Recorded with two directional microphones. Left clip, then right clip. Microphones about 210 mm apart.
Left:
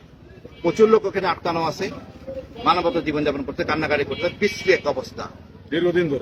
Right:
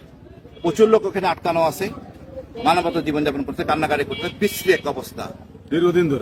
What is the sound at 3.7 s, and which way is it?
Speech, 30° right (ahead or behind).